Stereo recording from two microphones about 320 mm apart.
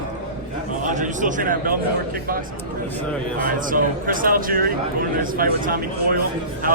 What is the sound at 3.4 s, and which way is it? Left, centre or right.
A man's voice, right.